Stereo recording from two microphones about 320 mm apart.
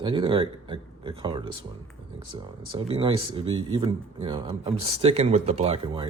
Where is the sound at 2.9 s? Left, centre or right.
Centre.